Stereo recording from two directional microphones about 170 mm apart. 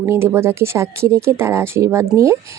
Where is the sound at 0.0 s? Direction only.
15° right (ahead or behind).